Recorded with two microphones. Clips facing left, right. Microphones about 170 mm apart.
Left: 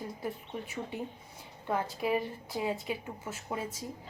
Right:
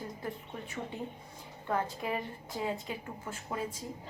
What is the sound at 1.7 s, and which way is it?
A woman's voice, 15° left (ahead or behind).